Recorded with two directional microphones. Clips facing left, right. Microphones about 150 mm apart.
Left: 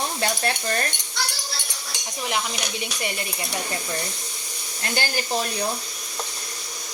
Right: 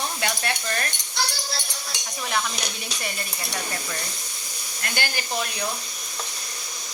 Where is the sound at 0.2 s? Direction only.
35° left (ahead or behind).